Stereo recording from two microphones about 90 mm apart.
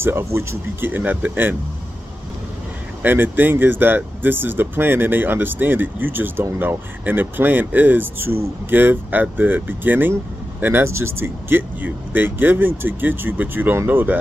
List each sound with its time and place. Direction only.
0.0 s speech: 30° right (ahead or behind)
3.0 s speech: 20° right (ahead or behind)